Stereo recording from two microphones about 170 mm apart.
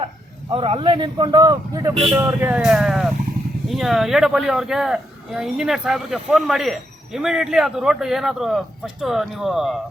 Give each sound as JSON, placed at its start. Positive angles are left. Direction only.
{"t": 0.5, "sound": "a man's voice", "side_deg": -35}
{"t": 2.1, "sound": "speech", "side_deg": -15}
{"t": 2.6, "sound": "speech", "side_deg": -5}